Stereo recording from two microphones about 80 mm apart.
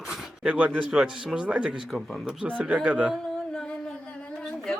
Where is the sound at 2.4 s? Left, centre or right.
Centre.